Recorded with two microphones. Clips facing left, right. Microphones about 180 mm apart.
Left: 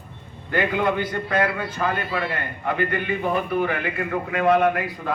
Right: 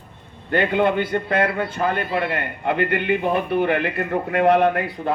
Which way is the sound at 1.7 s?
50° right (ahead or behind).